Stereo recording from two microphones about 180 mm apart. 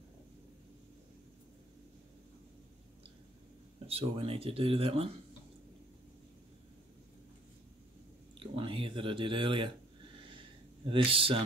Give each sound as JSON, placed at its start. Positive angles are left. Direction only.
{"t": 3.8, "sound": "speech", "side_deg": -30}
{"t": 8.4, "sound": "a sound", "side_deg": -30}
{"t": 10.9, "sound": "speech", "side_deg": -30}